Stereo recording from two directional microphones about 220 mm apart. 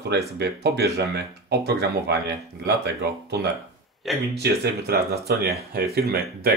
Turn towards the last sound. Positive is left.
turn(degrees=-45)  # may be behind; listen again after turning